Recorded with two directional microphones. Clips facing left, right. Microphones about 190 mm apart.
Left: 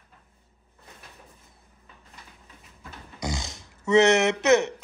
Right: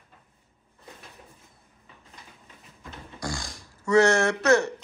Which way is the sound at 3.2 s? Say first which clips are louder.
Left 2 dB; 20° left (ahead or behind).